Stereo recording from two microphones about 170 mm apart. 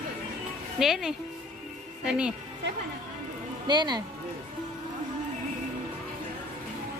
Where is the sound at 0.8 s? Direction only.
Centre (ahead or behind).